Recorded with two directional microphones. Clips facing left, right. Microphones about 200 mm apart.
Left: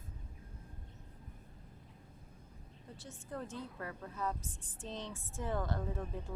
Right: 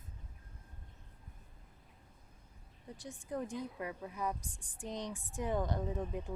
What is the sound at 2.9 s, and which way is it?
Speech, 15° right (ahead or behind).